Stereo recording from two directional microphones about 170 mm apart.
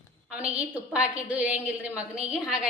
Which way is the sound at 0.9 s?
10° right (ahead or behind).